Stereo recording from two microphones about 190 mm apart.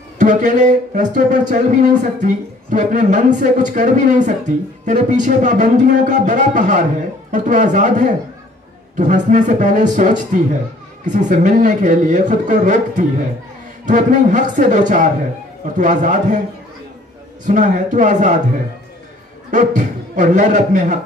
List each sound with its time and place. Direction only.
0.2 s speech: 40° right (ahead or behind)
17.5 s speech: 40° right (ahead or behind)
19.5 s speech: 40° right (ahead or behind)